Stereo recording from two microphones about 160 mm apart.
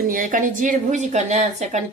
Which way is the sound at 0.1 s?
60° right (ahead or behind).